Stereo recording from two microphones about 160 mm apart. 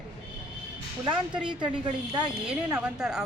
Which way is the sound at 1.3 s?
5° right (ahead or behind).